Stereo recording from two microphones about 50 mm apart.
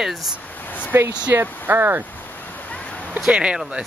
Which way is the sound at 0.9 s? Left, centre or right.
Right.